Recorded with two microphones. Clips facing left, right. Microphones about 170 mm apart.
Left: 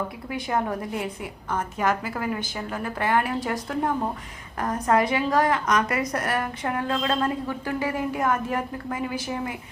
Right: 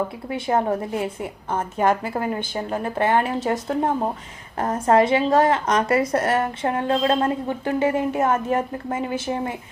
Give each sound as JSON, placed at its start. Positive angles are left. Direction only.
{"t": 0.3, "sound": "a woman's voice", "side_deg": -25}